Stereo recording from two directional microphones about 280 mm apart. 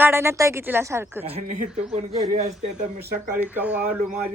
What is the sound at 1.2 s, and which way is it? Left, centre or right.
Speech, right.